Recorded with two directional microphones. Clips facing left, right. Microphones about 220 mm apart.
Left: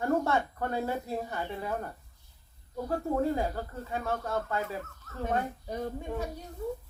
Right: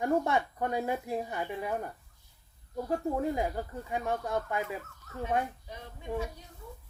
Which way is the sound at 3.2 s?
15° right (ahead or behind).